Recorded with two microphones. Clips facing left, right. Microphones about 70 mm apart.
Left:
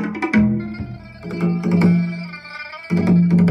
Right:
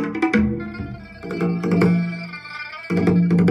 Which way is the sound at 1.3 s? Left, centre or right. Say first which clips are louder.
Left 1 dB; right.